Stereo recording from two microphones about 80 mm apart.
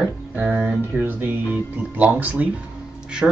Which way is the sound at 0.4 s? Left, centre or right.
Centre.